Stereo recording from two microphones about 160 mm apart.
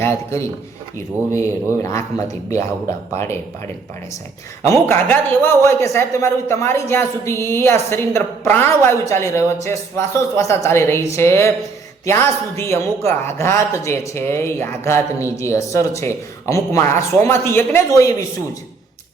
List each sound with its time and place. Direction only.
0.0 s a man's voice: 15° left (ahead or behind)
4.9 s speech: 10° left (ahead or behind)